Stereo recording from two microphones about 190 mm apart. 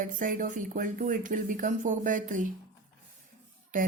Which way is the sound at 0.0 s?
45° right (ahead or behind).